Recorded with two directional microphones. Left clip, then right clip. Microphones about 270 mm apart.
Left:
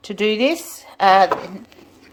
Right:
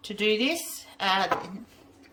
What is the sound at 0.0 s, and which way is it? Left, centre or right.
A woman's voice, centre.